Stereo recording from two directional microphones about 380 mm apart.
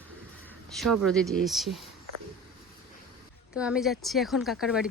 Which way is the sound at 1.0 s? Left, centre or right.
Centre.